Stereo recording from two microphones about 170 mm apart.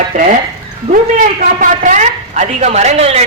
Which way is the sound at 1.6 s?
45° right (ahead or behind).